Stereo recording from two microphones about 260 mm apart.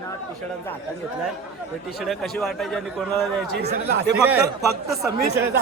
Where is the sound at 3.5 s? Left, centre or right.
Right.